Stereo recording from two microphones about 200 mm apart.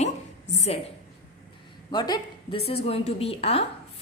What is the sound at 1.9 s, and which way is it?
A man's voice, 20° left (ahead or behind).